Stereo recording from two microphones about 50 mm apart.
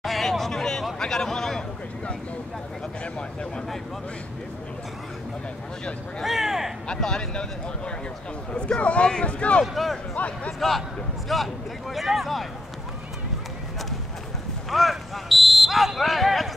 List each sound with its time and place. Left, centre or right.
0.0 s hubbub: centre
0.9 s speech: centre
6.2 s a sound: centre
6.9 s speech: centre
11.3 s speech: centre
14.7 s a sound: centre